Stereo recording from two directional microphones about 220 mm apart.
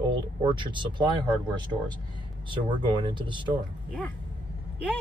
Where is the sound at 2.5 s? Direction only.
20° right (ahead or behind).